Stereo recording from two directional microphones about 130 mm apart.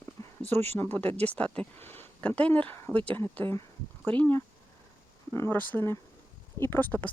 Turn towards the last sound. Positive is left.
turn(degrees=15)  # may be behind; listen again after turning